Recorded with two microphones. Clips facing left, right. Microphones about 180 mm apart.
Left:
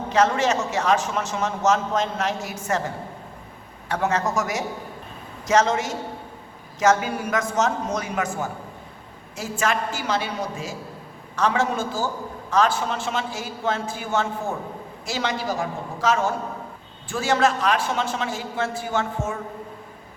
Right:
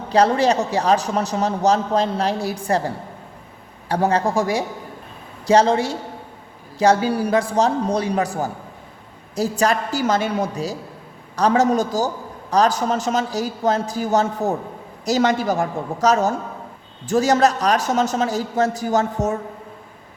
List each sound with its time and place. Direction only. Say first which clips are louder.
0.1 s a man's voice: right 4 dB; 35° right (ahead or behind)